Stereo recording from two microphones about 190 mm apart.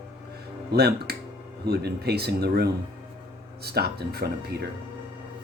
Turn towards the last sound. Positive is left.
turn(degrees=-60)  # may be behind; listen again after turning